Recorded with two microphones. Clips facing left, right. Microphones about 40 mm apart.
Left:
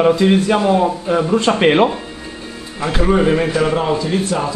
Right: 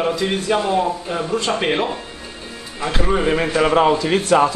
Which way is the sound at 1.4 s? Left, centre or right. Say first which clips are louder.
Left 7 dB; left.